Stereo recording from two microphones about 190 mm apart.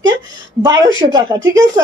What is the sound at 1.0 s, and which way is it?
Speech, 20° right (ahead or behind).